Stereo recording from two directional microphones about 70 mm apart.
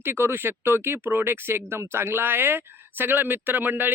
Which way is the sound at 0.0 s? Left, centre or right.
Right.